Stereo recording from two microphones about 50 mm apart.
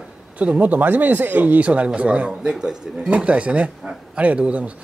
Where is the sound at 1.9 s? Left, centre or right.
Right.